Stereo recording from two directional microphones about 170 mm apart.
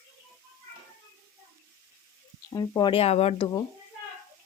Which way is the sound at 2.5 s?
25° left (ahead or behind).